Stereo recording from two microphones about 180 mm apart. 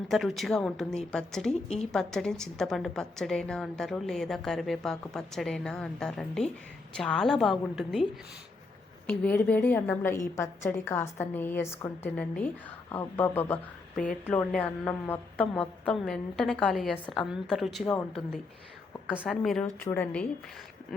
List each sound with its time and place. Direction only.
0.1 s a woman's voice: centre (ahead or behind)
1.6 s a woman's voice: 35° left (ahead or behind)
1.9 s a woman's voice: 5° left (ahead or behind)
9.0 s a woman's voice: 10° left (ahead or behind)
19.2 s a woman's voice: 5° left (ahead or behind)